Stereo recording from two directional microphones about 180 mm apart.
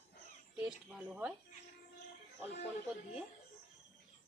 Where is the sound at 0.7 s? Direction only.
5° right (ahead or behind).